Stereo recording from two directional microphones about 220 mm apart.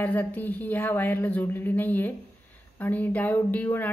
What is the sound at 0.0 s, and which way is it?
Speech, 10° left (ahead or behind).